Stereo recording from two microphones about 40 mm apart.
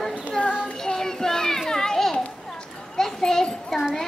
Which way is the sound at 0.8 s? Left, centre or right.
Centre.